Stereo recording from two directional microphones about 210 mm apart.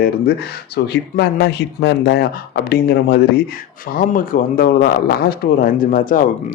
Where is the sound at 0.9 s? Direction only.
50° left (ahead or behind).